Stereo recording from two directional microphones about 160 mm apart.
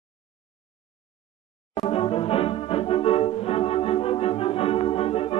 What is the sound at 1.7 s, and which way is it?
Music, 35° left (ahead or behind).